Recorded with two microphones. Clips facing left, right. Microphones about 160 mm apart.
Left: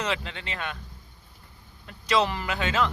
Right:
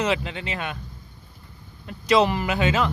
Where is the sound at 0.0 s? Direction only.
10° right (ahead or behind).